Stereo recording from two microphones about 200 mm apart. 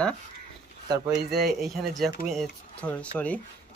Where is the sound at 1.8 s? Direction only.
Centre (ahead or behind).